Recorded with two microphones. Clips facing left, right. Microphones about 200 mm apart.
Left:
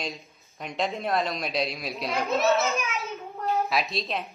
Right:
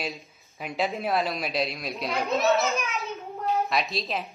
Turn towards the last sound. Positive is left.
turn(degrees=0)  # may be behind; listen again after turning